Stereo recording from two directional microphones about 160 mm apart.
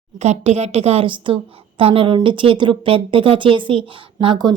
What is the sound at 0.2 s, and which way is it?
A woman's voice, 45° right (ahead or behind).